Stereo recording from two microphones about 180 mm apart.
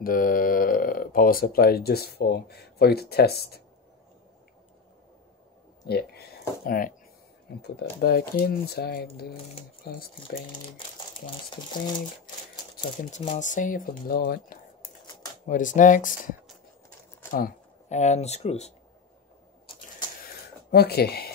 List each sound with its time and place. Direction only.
0.0 s speech: 50° left (ahead or behind)
5.9 s speech: 60° left (ahead or behind)
8.0 s speech: 55° left (ahead or behind)
11.2 s speech: 25° left (ahead or behind)
13.3 s speech: 45° left (ahead or behind)
15.4 s speech: 45° left (ahead or behind)
17.3 s speech: 50° left (ahead or behind)
20.7 s speech: 60° left (ahead or behind)